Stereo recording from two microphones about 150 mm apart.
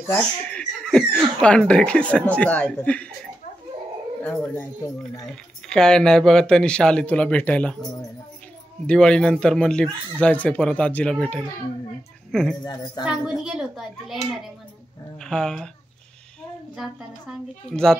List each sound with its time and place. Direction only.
0.1 s speech: 5° left (ahead or behind)
4.2 s speech: 10° left (ahead or behind)
8.8 s speech: 5° left (ahead or behind)
13.0 s a woman's voice: 30° left (ahead or behind)
13.4 s speech: centre (ahead or behind)